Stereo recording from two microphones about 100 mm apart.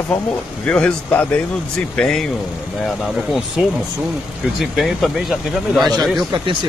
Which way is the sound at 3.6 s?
10° right (ahead or behind).